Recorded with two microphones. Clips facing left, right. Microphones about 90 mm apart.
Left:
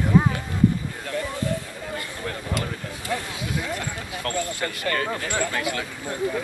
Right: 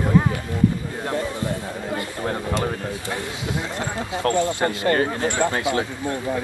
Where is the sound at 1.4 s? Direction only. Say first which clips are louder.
Right 2 dB; 20° right (ahead or behind).